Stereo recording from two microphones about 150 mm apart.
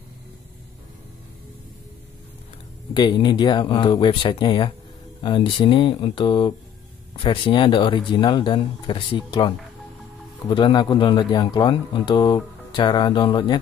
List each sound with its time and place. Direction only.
2.9 s a man's voice: 30° left (ahead or behind)
10.5 s a man's voice: 30° left (ahead or behind)